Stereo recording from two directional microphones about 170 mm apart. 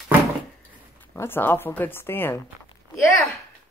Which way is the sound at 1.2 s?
15° left (ahead or behind).